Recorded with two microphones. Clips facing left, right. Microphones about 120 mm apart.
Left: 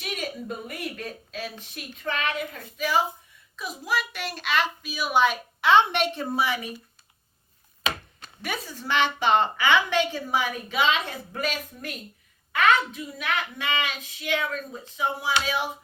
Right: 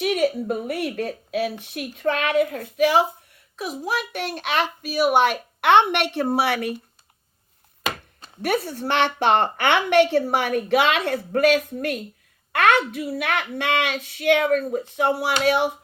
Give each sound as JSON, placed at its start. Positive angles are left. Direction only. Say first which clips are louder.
{"t": 0.0, "sound": "a woman's voice", "louder": "right 12 dB", "side_deg": -60}
{"t": 8.4, "sound": "a woman's voice", "louder": "right 10 dB", "side_deg": -60}